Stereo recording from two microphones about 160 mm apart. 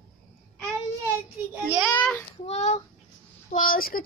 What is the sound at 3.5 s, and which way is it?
Speech, 60° left (ahead or behind).